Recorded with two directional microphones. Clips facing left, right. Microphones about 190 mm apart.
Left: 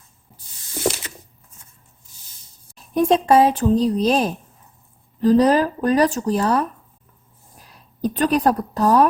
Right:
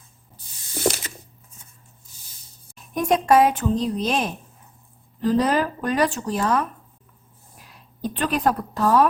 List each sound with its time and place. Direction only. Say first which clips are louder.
2.7 s speech: left 4 dB; 30° left (ahead or behind)
8.0 s speech: left 4 dB; 40° left (ahead or behind)